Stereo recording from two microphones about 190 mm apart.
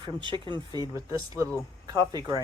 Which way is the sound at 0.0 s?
25° right (ahead or behind).